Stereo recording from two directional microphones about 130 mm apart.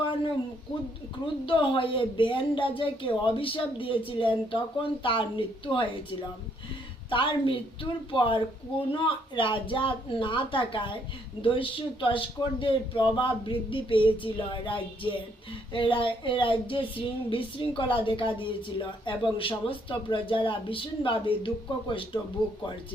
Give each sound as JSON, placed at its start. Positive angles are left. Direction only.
{"t": 1.5, "sound": "speech", "side_deg": 40}
{"t": 7.1, "sound": "speech", "side_deg": 40}